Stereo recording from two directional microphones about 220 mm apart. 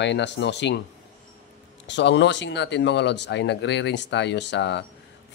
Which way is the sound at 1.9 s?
55° left (ahead or behind).